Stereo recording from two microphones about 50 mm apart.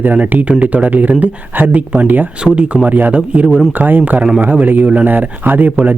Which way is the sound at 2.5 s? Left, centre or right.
Right.